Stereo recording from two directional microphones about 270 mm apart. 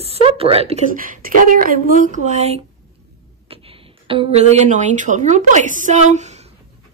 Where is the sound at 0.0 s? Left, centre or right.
Right.